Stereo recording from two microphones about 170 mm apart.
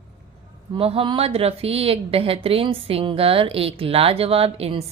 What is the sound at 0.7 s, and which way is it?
Speech, 35° right (ahead or behind).